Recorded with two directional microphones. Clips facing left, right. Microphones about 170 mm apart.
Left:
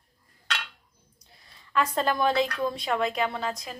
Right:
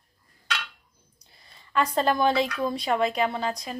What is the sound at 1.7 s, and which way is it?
A woman's voice, centre (ahead or behind).